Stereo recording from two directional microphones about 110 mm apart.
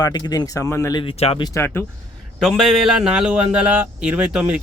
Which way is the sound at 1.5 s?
20° left (ahead or behind).